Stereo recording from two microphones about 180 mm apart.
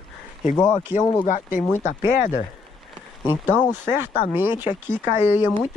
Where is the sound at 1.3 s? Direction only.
45° left (ahead or behind).